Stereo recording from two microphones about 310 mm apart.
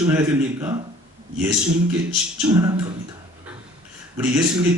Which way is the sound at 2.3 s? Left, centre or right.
Centre.